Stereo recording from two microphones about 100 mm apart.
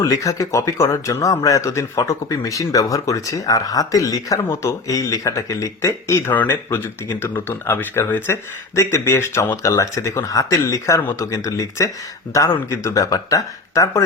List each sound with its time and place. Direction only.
0.0 s speech: 35° left (ahead or behind)